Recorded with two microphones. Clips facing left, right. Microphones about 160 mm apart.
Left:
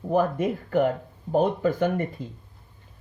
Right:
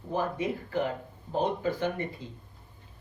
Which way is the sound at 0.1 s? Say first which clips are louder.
Left 7 dB; 55° left (ahead or behind).